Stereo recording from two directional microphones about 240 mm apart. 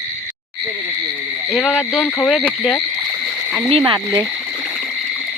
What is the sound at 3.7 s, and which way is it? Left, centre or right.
Frog, right.